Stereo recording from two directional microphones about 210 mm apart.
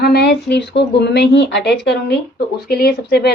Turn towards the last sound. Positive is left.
turn(degrees=50)  # may be behind; listen again after turning